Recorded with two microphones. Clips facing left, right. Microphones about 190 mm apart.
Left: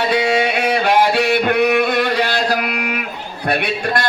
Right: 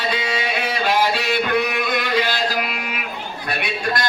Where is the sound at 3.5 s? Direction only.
60° left (ahead or behind).